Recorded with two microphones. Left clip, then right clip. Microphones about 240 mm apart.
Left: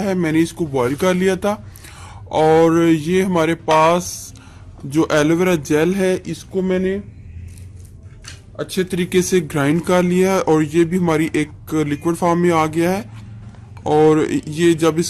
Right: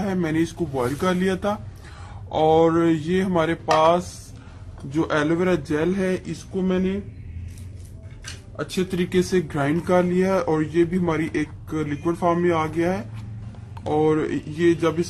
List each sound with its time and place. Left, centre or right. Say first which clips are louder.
0.0 s a man's voice: left 6 dB; left
8.5 s speech: left 4 dB; left